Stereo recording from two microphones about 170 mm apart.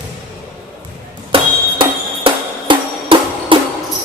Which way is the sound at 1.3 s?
30° right (ahead or behind).